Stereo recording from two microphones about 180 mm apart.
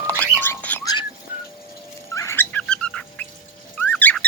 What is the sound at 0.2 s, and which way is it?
Music, 10° left (ahead or behind).